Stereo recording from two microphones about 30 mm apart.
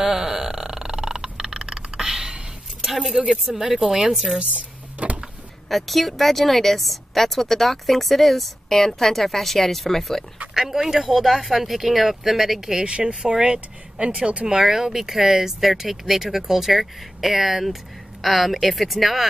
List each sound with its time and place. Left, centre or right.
0.0 s burping: centre
2.8 s a sound: centre
3.7 s speech: centre
4.4 s a sound: right
5.7 s speech: centre
10.5 s speech: centre
12.9 s speech: right
14.5 s speech: centre